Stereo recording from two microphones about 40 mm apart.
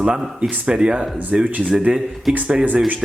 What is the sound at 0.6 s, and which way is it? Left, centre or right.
Speech, right.